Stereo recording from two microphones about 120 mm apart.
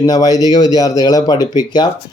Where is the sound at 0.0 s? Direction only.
30° left (ahead or behind).